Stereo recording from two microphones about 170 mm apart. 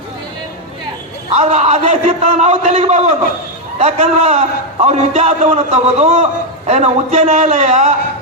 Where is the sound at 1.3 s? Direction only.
40° right (ahead or behind).